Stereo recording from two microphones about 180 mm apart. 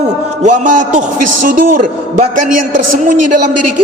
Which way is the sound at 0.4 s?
45° right (ahead or behind).